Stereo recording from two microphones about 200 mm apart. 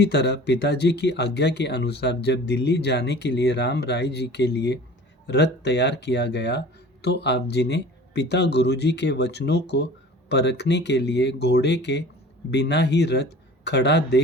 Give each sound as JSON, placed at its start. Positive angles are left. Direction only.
{"t": 0.0, "sound": "speech", "side_deg": 55}